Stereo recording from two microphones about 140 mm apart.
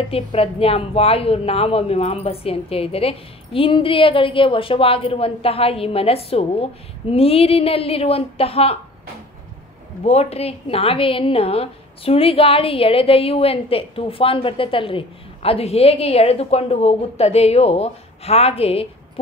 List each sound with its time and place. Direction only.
0.1 s a woman's voice: 45° left (ahead or behind)
10.0 s a woman's voice: 45° left (ahead or behind)